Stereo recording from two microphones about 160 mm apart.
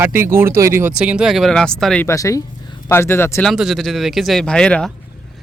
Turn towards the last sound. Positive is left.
turn(degrees=5)  # may be behind; listen again after turning